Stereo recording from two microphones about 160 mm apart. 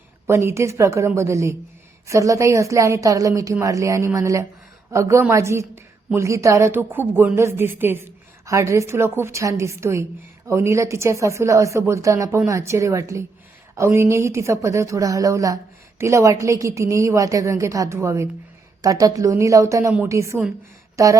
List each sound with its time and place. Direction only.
0.3 s a woman's voice: 15° right (ahead or behind)